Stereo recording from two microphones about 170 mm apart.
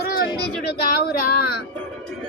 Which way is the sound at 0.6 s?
70° left (ahead or behind).